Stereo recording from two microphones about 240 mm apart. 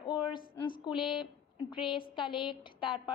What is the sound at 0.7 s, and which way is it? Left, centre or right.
Speech, centre.